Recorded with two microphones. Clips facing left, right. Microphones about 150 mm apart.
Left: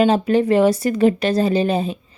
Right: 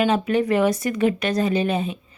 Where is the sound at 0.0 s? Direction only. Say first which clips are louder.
Left 4 dB; 30° left (ahead or behind).